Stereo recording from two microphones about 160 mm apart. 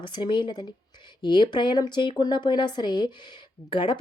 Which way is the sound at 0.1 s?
30° left (ahead or behind).